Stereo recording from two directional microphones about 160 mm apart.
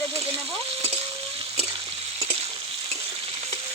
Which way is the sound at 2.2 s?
40° right (ahead or behind).